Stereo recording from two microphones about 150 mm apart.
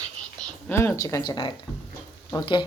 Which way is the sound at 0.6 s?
15° left (ahead or behind).